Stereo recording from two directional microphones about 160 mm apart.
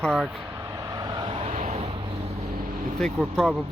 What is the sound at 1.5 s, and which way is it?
Vehicle, 45° right (ahead or behind).